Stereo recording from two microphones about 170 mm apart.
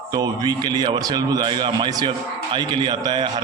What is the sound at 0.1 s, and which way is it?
A man's voice, 25° right (ahead or behind).